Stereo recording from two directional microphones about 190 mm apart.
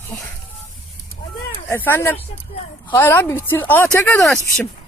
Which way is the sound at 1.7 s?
10° left (ahead or behind).